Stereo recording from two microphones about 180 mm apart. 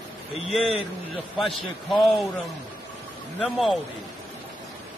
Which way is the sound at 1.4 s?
Centre (ahead or behind).